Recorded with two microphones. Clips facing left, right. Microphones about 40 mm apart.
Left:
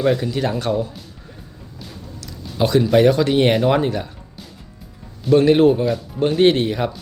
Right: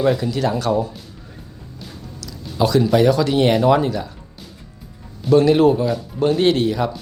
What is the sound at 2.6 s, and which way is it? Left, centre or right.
Speech, left.